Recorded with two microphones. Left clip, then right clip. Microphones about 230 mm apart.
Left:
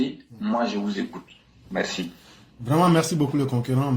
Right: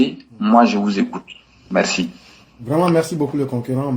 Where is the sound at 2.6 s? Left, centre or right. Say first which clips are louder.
Right 4 dB; left.